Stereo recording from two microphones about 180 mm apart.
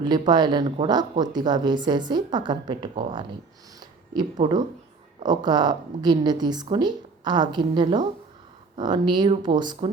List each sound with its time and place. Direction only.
0.0 s speech: 25° right (ahead or behind)
3.8 s a sound: 20° right (ahead or behind)
5.2 s speech: 25° right (ahead or behind)